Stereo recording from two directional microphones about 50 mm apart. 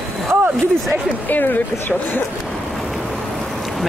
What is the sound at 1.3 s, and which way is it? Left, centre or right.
Speech, left.